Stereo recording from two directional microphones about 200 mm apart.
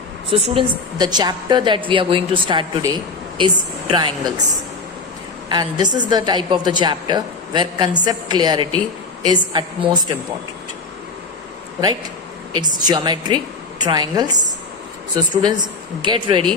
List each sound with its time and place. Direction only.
0.3 s a woman's voice: 25° right (ahead or behind)
5.5 s a woman's voice: 20° right (ahead or behind)
12.5 s a woman's voice: 20° right (ahead or behind)